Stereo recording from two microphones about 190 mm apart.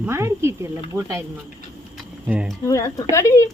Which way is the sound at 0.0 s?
15° right (ahead or behind).